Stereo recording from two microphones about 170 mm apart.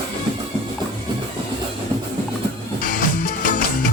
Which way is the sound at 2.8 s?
55° left (ahead or behind).